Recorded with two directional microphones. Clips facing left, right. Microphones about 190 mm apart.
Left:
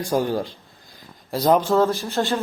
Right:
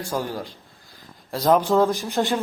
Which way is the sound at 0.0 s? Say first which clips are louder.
Left 6 dB; 20° left (ahead or behind).